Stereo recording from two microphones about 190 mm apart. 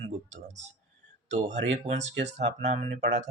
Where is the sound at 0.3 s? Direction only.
40° right (ahead or behind).